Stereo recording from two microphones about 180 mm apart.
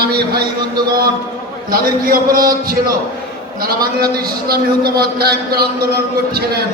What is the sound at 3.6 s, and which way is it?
A man's voice, 55° right (ahead or behind).